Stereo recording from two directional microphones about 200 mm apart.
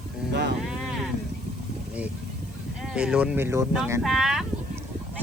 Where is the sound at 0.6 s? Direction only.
Centre (ahead or behind).